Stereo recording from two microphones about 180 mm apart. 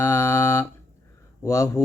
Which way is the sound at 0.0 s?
15° left (ahead or behind).